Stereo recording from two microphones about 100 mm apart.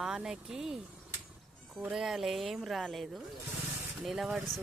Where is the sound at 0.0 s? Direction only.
5° right (ahead or behind).